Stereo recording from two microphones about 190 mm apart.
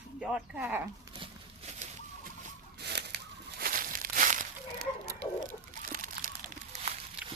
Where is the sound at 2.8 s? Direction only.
60° right (ahead or behind); by 4.4 s 45° right (ahead or behind).